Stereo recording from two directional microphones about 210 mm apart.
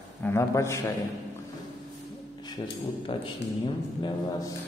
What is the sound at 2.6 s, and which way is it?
A man's voice, 25° left (ahead or behind).